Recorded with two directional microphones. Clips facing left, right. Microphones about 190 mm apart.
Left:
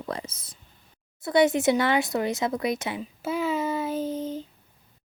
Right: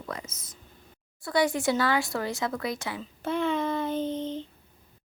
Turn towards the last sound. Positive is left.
turn(degrees=10)  # may be behind; listen again after turning